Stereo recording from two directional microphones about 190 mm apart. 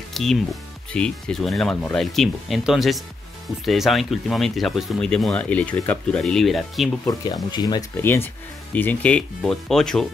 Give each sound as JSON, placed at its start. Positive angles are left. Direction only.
{"t": 0.1, "sound": "speech", "side_deg": 0}
{"t": 7.5, "sound": "speech", "side_deg": 20}
{"t": 8.0, "sound": "speech", "side_deg": 10}